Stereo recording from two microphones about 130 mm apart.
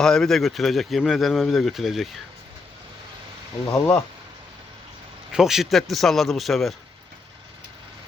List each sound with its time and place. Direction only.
0.0 s speech: 5° left (ahead or behind)
3.7 s speech: 10° left (ahead or behind)
5.3 s speech: 5° right (ahead or behind)